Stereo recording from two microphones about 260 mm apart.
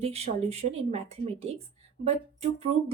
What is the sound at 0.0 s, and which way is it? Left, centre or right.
Speech, right.